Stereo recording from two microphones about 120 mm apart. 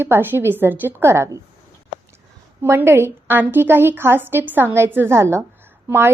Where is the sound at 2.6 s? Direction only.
20° right (ahead or behind).